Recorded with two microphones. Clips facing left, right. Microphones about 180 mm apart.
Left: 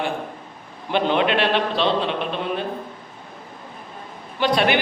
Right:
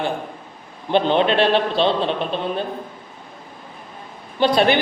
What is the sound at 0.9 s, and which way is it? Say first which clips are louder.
Speech: right 3 dB; 30° right (ahead or behind).